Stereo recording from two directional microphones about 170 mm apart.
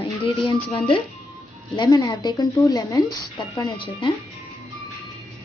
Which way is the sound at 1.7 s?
25° left (ahead or behind).